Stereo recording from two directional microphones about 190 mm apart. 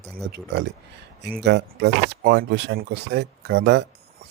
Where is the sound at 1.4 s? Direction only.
65° right (ahead or behind).